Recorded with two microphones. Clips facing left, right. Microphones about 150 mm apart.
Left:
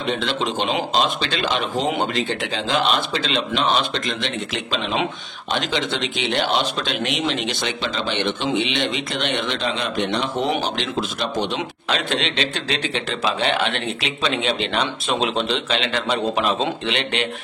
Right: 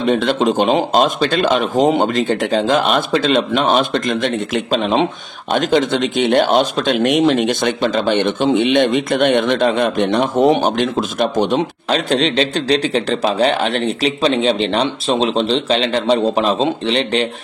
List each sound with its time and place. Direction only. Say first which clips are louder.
0.0 s speech: right 8 dB; 45° right (ahead or behind)